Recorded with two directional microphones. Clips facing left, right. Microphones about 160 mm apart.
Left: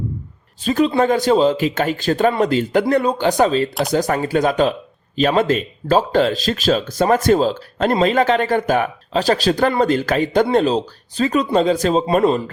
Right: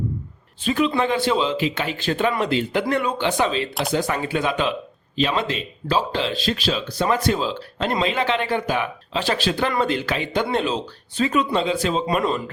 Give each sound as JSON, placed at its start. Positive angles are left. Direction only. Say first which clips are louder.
{"t": 0.6, "sound": "speech", "louder": "left 5 dB", "side_deg": 40}